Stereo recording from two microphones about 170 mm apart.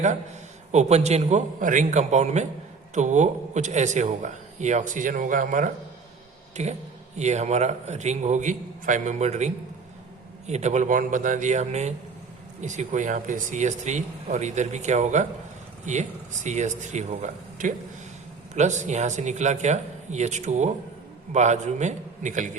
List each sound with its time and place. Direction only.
0.7 s a man's voice: 40° right (ahead or behind)